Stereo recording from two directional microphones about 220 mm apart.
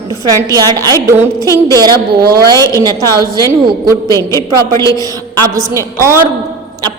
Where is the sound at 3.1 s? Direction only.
15° right (ahead or behind).